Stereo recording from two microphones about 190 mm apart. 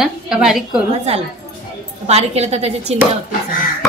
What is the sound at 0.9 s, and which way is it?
Speech, 30° right (ahead or behind).